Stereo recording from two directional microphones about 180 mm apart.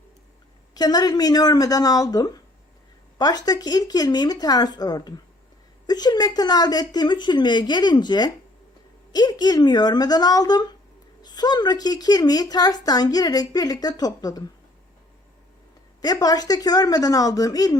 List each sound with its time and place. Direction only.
0.7 s a woman's voice: 20° left (ahead or behind)
16.0 s a woman's voice: 20° left (ahead or behind)